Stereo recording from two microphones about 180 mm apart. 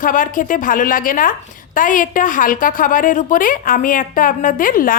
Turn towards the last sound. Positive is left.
turn(degrees=50)  # may be behind; listen again after turning